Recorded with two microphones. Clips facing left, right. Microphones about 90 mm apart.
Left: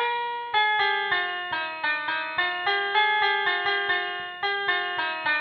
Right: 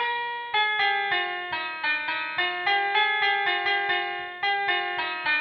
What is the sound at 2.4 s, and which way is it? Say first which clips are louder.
Music: right 2 dB; 35° left (ahead or behind).